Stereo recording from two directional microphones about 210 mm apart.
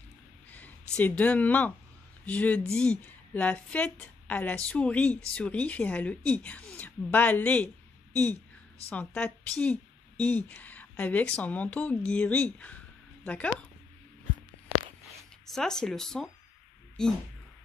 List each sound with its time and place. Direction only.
0.9 s a woman's voice: 5° left (ahead or behind)
8.9 s a woman's voice: 5° left (ahead or behind)
15.5 s speech: 5° left (ahead or behind)